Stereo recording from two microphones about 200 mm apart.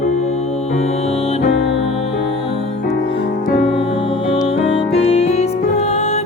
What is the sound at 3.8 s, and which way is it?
Music, 25° left (ahead or behind).